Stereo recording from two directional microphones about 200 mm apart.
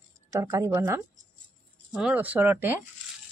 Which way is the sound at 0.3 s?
15° right (ahead or behind).